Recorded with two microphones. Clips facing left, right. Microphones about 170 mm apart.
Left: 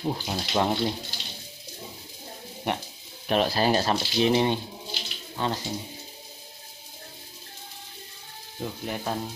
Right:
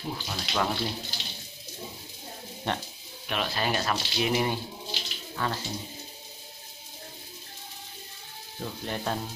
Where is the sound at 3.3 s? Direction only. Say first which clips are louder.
Left 7 dB; 35° left (ahead or behind).